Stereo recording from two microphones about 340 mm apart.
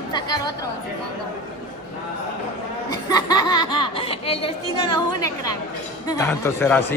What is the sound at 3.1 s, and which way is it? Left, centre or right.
Speech, centre.